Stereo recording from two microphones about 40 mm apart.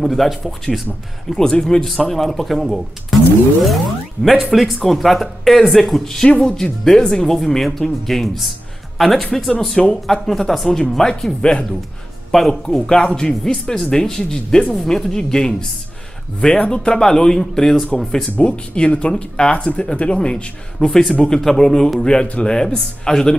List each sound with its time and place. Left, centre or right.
0.0 s speech: centre
16.5 s speech: left
16.8 s speech: centre
18.4 s speech: left
21.4 s speech: centre